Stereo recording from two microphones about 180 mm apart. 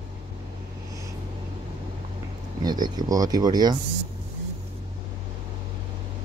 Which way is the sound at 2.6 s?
25° right (ahead or behind).